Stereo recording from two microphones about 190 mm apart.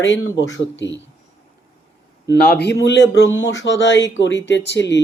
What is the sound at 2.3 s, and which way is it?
Speech, 55° left (ahead or behind).